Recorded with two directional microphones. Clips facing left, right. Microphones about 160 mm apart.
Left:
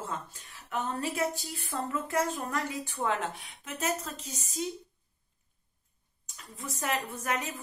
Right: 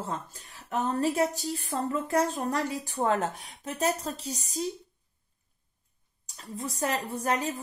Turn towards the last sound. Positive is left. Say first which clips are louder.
# right 5 dB
turn(degrees=-30)  # may be behind; listen again after turning